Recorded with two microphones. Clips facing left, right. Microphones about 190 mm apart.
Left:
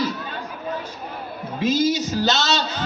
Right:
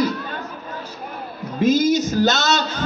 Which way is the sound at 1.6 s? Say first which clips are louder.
Right 4 dB; 50° right (ahead or behind).